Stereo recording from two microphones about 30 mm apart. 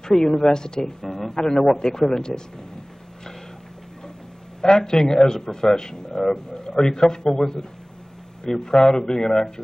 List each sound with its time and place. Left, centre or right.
0.0 s speech: centre
4.6 s speech: left